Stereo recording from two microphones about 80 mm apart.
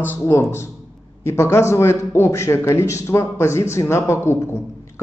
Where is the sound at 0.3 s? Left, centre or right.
Left.